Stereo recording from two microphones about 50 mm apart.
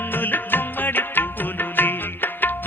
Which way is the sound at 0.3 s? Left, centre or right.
Left.